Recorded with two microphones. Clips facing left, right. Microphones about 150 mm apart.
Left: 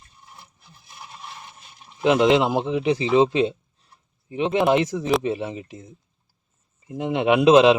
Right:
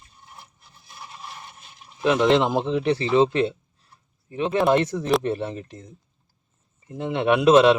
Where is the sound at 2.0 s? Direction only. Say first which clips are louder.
Left 2 dB; 20° left (ahead or behind).